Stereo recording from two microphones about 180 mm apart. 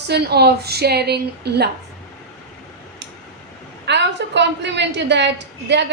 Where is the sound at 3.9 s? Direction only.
75° right (ahead or behind).